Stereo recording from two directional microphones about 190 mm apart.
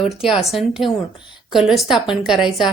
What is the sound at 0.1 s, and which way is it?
Speech, 5° right (ahead or behind).